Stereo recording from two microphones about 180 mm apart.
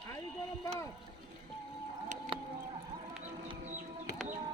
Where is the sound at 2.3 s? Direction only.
30° right (ahead or behind).